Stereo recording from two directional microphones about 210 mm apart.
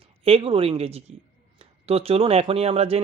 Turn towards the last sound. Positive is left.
turn(degrees=-30)  # may be behind; listen again after turning